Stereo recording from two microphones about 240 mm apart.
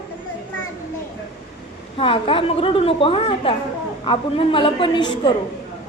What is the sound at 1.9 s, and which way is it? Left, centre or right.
A woman's voice, left.